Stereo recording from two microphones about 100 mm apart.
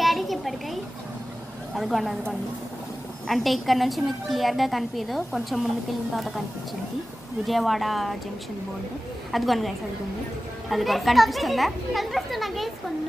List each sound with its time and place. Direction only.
0.0 s a sound: centre (ahead or behind)
1.8 s a woman's voice: centre (ahead or behind)
7.4 s a woman's voice: centre (ahead or behind)
9.3 s a woman's voice: centre (ahead or behind)